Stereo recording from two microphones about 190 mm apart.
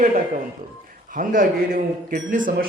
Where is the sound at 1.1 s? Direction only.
45° right (ahead or behind).